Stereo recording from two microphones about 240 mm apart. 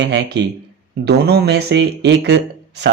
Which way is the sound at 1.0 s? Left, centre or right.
Right.